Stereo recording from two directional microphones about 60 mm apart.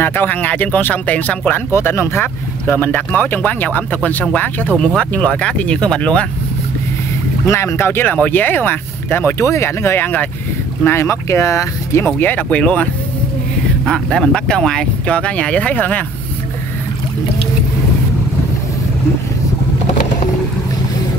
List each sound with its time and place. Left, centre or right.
0.0 s speech: left
1.7 s speech: left; by 6.2 s centre
7.5 s speech: left
9.4 s speech: left
10.8 s speech: left
12.2 s speech: left
13.8 s speech: centre